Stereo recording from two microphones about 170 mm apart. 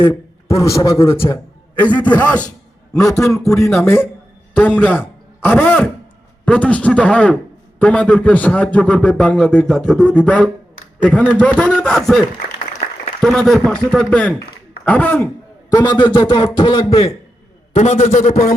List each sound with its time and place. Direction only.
0.0 s a man's voice: 15° left (ahead or behind)
13.2 s a man's voice: centre (ahead or behind)
15.7 s a man's voice: 25° left (ahead or behind); by 18.5 s 50° left (ahead or behind)